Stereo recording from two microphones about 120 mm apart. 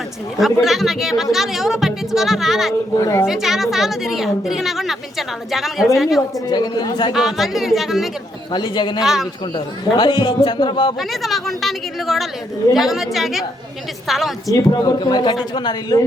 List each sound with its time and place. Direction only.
0.6 s a woman's voice: centre (ahead or behind)
3.0 s a woman's voice: 25° left (ahead or behind)
3.2 s a woman's voice: 5° right (ahead or behind)
6.5 s a man's voice: 35° left (ahead or behind)
7.1 s a woman's voice: centre (ahead or behind)
8.5 s a man's voice: 40° left (ahead or behind)
11.1 s a woman's voice: centre (ahead or behind)
14.4 s a man's voice: 30° left (ahead or behind)